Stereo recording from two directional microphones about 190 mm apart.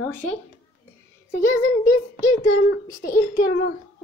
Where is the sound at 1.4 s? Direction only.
15° left (ahead or behind).